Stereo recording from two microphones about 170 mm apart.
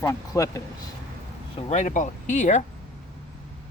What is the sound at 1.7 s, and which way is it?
Speech, 45° left (ahead or behind).